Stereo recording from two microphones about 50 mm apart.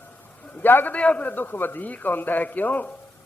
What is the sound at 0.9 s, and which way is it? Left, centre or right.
A man's voice, left.